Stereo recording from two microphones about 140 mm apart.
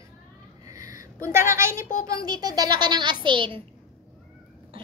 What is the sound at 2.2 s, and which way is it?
A child's voice, 30° right (ahead or behind).